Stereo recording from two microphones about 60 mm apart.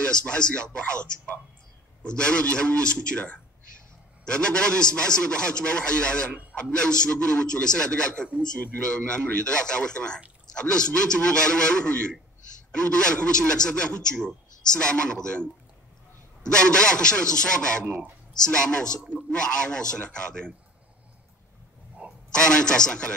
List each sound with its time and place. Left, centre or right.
0.0 s a man's voice: centre
22.3 s a man's voice: centre